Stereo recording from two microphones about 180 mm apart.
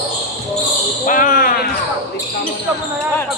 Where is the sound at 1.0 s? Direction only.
50° left (ahead or behind).